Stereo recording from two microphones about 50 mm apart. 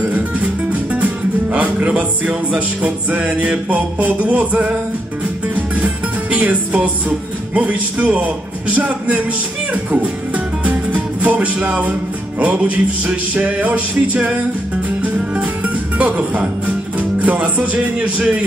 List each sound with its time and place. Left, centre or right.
0.1 s speech: right
6.3 s music: right
15.1 s music: right